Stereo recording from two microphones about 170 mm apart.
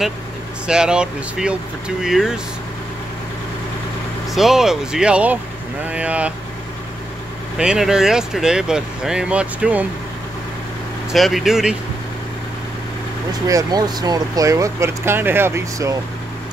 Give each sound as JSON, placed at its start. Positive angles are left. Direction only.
{"t": 0.7, "sound": "speech", "side_deg": -5}
{"t": 4.3, "sound": "speech", "side_deg": 0}
{"t": 7.5, "sound": "speech", "side_deg": -5}
{"t": 11.1, "sound": "speech", "side_deg": 0}
{"t": 13.5, "sound": "speech", "side_deg": -20}